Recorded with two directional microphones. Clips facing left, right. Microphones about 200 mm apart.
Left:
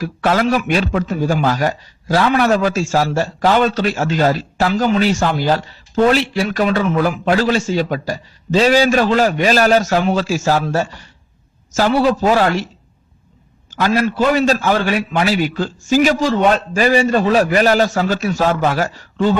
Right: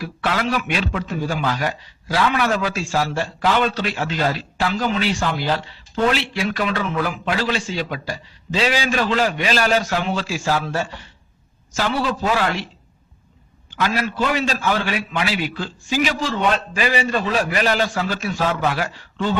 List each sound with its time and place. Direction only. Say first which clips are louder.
0.0 s a man's voice: left 7 dB; 45° left (ahead or behind)
13.7 s a man's voice: left 6 dB; 40° left (ahead or behind)